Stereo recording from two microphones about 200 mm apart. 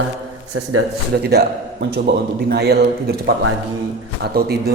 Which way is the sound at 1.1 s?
55° right (ahead or behind).